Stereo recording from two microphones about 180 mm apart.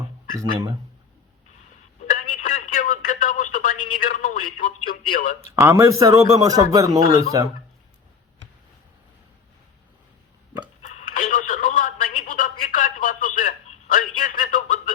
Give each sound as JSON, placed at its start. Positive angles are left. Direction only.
{"t": 2.0, "sound": "telephone", "side_deg": 45}
{"t": 5.1, "sound": "speech", "side_deg": 45}
{"t": 5.5, "sound": "a man's voice", "side_deg": -15}
{"t": 10.9, "sound": "a sound", "side_deg": 45}